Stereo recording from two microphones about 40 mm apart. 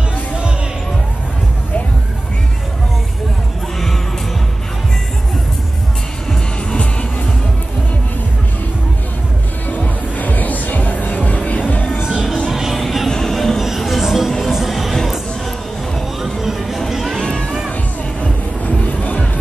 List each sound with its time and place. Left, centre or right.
9.8 s music: left
12.0 s music: centre
13.6 s music: centre
16.2 s music: centre
17.2 s music: left
18.2 s music: left